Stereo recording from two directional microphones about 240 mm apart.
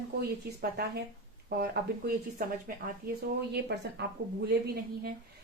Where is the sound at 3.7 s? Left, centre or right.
Right.